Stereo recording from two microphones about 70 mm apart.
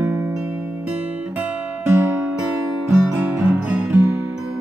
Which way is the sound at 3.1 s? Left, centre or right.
Right.